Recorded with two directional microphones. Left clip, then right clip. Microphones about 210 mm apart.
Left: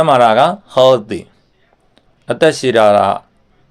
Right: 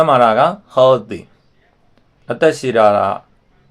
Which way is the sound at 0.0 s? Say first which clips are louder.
Left 2 dB; 40° left (ahead or behind).